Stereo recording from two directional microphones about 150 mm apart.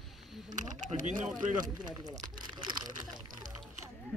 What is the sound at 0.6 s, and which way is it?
Speech, 55° right (ahead or behind).